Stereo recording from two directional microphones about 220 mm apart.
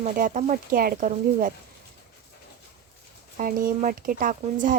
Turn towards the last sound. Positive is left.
turn(degrees=-35)  # may be behind; listen again after turning